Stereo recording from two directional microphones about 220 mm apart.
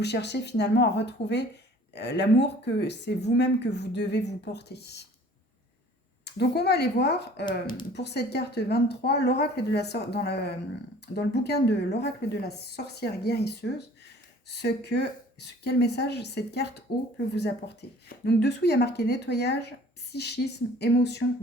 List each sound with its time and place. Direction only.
0.0 s speech: 50° left (ahead or behind)
6.2 s speech: 50° left (ahead or behind)